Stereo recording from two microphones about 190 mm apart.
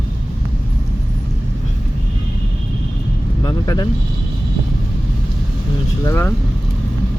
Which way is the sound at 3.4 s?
20° left (ahead or behind).